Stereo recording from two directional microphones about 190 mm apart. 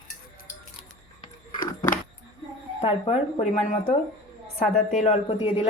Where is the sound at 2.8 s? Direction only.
30° left (ahead or behind).